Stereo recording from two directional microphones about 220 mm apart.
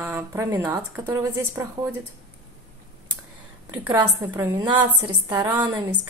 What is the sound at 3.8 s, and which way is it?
A woman's voice, 15° right (ahead or behind).